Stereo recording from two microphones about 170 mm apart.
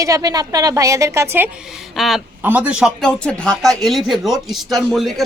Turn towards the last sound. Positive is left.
turn(degrees=0)  # may be behind; listen again after turning